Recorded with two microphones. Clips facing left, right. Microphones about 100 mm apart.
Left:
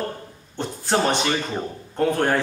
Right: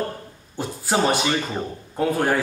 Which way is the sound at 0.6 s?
5° right (ahead or behind).